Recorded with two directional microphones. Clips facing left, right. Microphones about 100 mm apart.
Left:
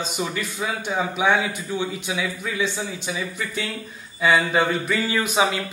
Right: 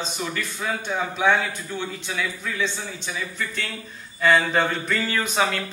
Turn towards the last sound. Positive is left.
turn(degrees=10)  # may be behind; listen again after turning